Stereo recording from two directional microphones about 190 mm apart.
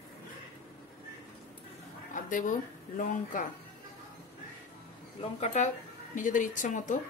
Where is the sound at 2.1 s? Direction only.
45° left (ahead or behind).